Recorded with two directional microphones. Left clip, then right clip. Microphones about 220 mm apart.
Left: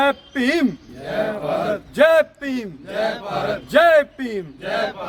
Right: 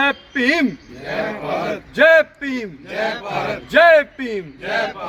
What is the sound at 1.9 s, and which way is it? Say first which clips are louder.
Speech: right 3 dB; 20° left (ahead or behind).